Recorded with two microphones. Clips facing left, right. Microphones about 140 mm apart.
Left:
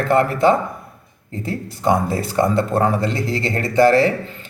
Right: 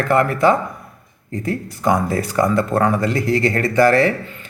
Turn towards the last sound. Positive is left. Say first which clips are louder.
# even
turn(degrees=25)  # may be behind; listen again after turning